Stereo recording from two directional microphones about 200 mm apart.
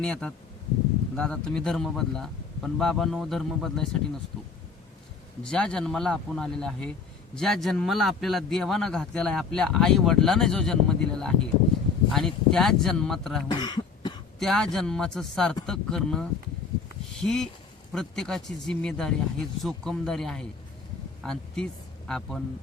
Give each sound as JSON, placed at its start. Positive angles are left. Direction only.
{"t": 0.0, "sound": "a man's voice", "side_deg": 5}
{"t": 5.4, "sound": "a man's voice", "side_deg": 5}
{"t": 13.5, "sound": "cough", "side_deg": 20}
{"t": 14.3, "sound": "a man's voice", "side_deg": 0}